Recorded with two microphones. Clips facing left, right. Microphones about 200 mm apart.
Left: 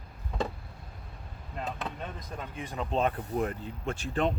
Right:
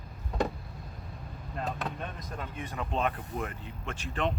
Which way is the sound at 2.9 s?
35° left (ahead or behind).